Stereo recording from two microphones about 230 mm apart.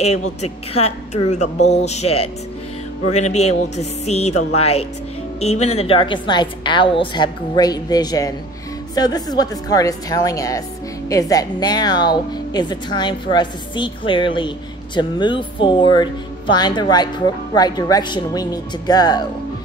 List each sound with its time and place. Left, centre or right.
0.0 s a woman's voice: left